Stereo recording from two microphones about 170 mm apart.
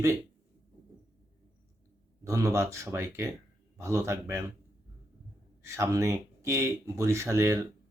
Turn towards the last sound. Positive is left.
turn(degrees=-15)  # may be behind; listen again after turning